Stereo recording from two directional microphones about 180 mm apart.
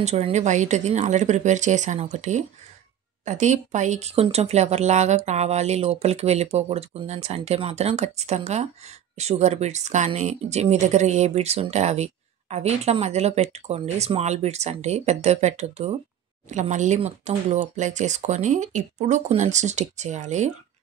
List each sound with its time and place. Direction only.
0.0 s speech: 40° right (ahead or behind)